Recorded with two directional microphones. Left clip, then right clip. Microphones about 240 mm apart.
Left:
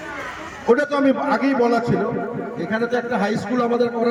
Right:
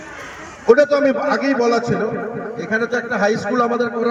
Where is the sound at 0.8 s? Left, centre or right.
Centre.